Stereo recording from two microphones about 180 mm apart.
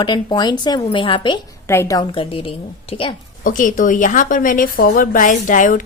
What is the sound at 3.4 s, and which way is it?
A woman's voice, 45° left (ahead or behind).